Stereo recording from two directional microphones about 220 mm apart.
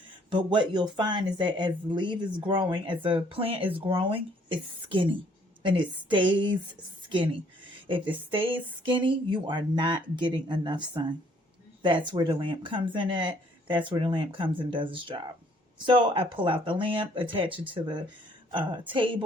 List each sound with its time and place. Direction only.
0.3 s speech: 20° right (ahead or behind)
5.6 s speech: 20° right (ahead or behind)
7.9 s speech: 20° right (ahead or behind)